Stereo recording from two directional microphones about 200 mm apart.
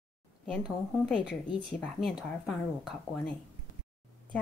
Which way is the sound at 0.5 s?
Centre (ahead or behind).